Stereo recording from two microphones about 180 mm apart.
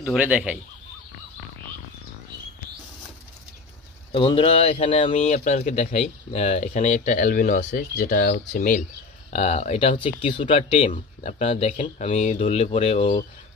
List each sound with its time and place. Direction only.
0.0 s speech: 5° right (ahead or behind)
4.1 s speech: 30° left (ahead or behind); by 8.8 s 50° left (ahead or behind)
9.3 s speech: 35° left (ahead or behind)